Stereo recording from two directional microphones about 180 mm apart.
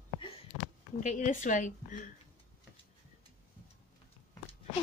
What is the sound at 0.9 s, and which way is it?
A woman's voice, 45° left (ahead or behind).